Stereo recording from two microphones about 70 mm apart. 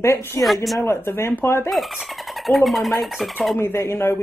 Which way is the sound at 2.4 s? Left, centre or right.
Centre.